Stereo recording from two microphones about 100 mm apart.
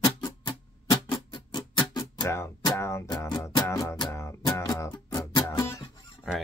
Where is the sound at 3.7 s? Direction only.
30° left (ahead or behind).